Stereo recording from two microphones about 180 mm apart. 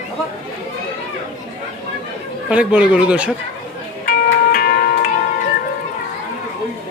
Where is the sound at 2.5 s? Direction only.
5° right (ahead or behind).